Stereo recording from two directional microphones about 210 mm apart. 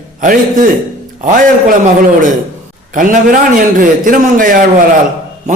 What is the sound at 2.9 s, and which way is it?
A man's voice, 40° right (ahead or behind).